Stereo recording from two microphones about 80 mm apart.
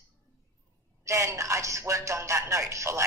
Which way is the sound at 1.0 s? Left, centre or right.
Right.